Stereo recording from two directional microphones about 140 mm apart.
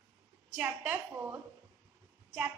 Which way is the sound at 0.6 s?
15° right (ahead or behind).